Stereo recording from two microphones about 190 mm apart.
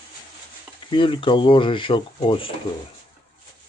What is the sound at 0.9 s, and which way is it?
Speech, 25° left (ahead or behind).